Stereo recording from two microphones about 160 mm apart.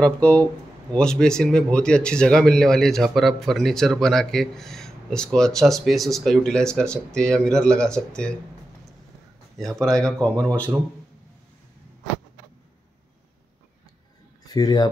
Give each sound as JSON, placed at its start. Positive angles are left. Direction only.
{"t": 0.0, "sound": "speech", "side_deg": 10}
{"t": 9.8, "sound": "speech", "side_deg": 0}
{"t": 14.5, "sound": "speech", "side_deg": 25}